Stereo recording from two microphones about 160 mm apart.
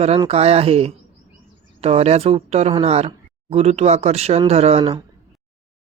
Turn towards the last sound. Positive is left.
turn(degrees=-35)  # may be behind; listen again after turning